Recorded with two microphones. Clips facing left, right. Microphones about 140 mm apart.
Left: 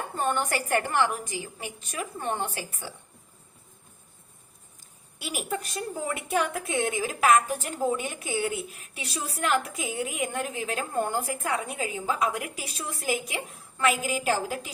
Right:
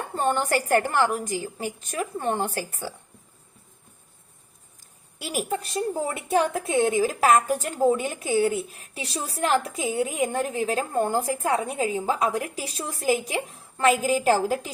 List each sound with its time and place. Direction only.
0.2 s a woman's voice: 35° right (ahead or behind)
5.2 s a woman's voice: 40° right (ahead or behind)